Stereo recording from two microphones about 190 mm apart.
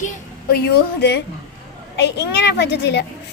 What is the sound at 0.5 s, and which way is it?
A child's voice, 60° left (ahead or behind).